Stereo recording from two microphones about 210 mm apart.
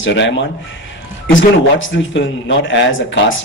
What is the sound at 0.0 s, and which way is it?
Speech, 60° left (ahead or behind).